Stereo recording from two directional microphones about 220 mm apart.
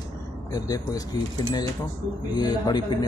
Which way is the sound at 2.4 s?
20° left (ahead or behind).